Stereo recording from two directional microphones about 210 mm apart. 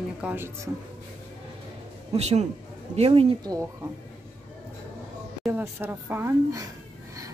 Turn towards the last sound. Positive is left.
turn(degrees=-10)  # may be behind; listen again after turning